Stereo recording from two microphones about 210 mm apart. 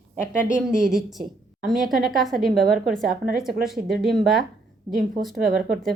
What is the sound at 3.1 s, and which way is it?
Speech, 40° right (ahead or behind).